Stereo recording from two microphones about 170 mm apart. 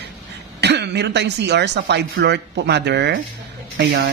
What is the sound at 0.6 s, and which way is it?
Speech, 85° right.